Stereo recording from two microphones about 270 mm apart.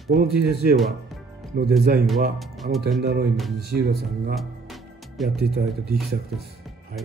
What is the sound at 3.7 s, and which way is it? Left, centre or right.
Speech, right.